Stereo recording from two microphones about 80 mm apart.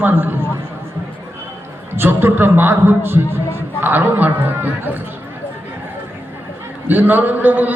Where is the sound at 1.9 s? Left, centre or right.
Right.